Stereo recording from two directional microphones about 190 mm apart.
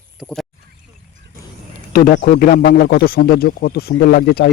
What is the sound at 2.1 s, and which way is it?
Speech, 55° left (ahead or behind).